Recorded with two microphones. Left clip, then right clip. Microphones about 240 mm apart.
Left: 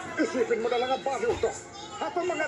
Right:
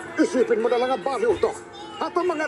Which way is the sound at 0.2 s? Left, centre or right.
Right.